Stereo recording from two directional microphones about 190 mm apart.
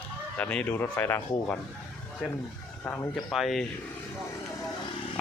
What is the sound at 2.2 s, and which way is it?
Speech, centre (ahead or behind).